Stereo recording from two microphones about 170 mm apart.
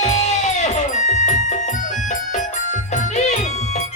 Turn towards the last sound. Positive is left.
turn(degrees=40)  # may be behind; listen again after turning